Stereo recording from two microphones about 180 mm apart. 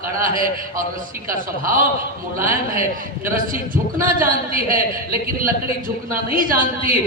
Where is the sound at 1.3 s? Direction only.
50° right (ahead or behind).